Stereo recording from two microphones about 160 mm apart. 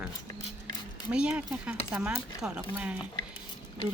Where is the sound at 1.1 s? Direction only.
5° right (ahead or behind).